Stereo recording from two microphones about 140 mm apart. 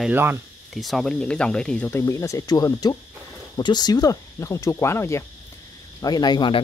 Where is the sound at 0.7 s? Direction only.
Centre (ahead or behind).